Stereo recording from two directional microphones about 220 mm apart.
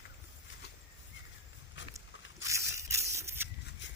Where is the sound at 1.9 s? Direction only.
15° right (ahead or behind).